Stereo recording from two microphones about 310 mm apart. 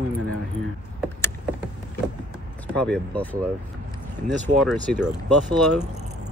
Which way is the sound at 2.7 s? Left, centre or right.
Centre.